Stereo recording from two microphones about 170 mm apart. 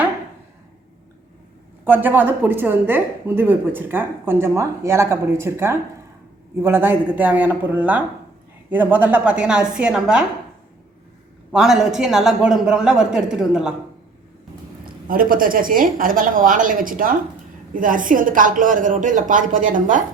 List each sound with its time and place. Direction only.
1.8 s a woman's voice: 10° right (ahead or behind)
11.5 s a man's voice: 5° right (ahead or behind)
14.8 s a woman's voice: 55° right (ahead or behind)